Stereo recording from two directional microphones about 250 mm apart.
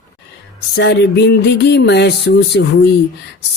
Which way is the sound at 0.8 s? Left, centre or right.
Left.